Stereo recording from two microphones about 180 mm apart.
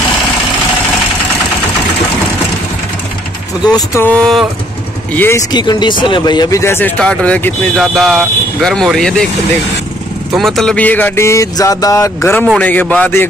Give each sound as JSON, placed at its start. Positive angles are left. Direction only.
{"t": 3.6, "sound": "speech", "side_deg": 20}
{"t": 5.5, "sound": "speech", "side_deg": 25}
{"t": 10.3, "sound": "speech", "side_deg": 0}